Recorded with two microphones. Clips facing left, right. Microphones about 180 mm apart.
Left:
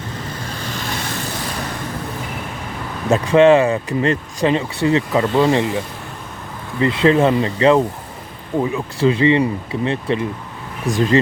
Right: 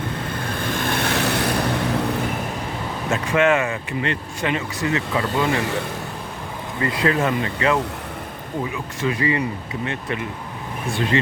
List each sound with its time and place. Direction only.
0.3 s vehicle: 55° right (ahead or behind)
3.1 s speech: 35° left (ahead or behind)
6.7 s speech: 25° left (ahead or behind)
9.0 s speech: 25° left (ahead or behind)